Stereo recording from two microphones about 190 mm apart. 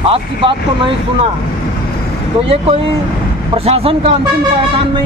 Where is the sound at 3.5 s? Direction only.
30° right (ahead or behind).